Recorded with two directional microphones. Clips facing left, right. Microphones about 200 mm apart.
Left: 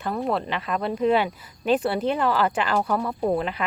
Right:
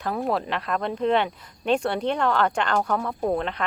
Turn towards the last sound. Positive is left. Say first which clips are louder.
# left 1 dB
turn(degrees=5)  # may be behind; listen again after turning